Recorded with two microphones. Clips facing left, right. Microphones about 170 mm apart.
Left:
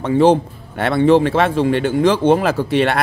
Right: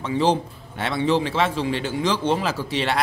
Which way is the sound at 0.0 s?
55° left (ahead or behind).